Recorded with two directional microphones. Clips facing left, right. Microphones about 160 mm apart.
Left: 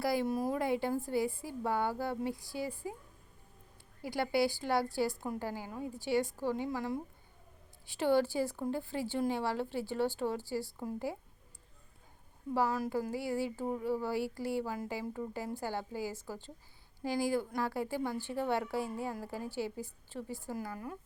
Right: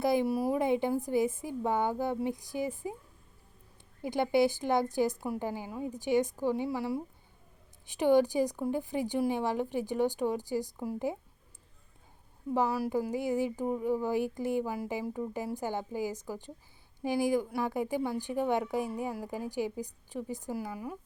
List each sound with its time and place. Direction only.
0.0 s a woman's voice: 20° right (ahead or behind)
4.0 s a woman's voice: 20° right (ahead or behind)
12.5 s a woman's voice: 15° right (ahead or behind)